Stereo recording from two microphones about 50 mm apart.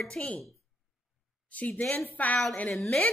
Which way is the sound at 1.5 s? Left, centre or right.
Left.